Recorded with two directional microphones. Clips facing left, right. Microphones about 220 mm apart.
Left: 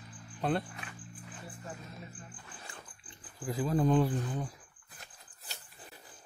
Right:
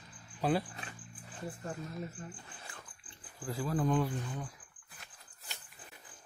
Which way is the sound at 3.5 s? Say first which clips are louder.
Left 4 dB; 20° left (ahead or behind).